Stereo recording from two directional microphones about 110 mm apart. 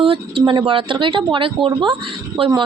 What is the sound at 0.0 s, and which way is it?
Speech, 50° right (ahead or behind).